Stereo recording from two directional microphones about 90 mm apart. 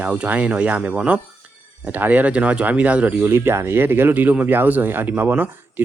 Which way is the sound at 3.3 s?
30° right (ahead or behind).